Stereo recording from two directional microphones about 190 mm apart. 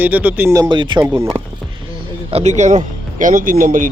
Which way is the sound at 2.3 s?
35° right (ahead or behind).